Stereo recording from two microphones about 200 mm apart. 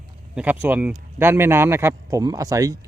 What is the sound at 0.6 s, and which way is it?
Speech, 10° right (ahead or behind).